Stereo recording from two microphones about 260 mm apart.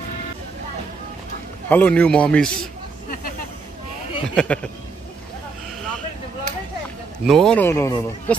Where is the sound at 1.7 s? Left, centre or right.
Centre.